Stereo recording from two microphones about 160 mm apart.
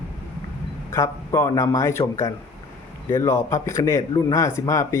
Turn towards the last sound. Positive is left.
turn(degrees=20)  # may be behind; listen again after turning